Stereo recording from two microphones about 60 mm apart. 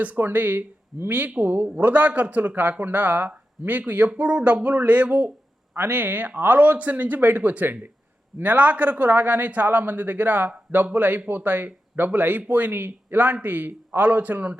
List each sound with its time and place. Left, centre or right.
0.0 s a man's voice: right